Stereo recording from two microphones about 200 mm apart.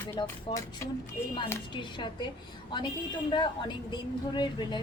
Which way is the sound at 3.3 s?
20° left (ahead or behind).